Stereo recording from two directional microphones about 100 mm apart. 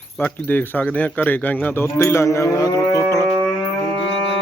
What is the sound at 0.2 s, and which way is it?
Speech, 15° left (ahead or behind).